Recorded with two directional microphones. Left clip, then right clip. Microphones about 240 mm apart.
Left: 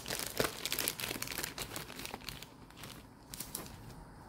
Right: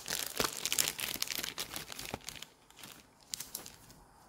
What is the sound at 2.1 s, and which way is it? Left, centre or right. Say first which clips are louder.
Crumpling: right 2 dB; right.